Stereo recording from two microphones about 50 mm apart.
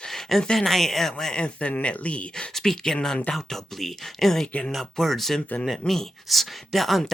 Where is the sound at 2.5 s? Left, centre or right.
Centre.